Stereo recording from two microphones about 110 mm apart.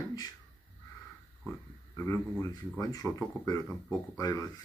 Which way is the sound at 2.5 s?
35° left (ahead or behind).